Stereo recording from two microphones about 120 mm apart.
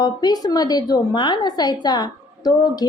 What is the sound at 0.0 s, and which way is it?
A woman's voice, 35° left (ahead or behind).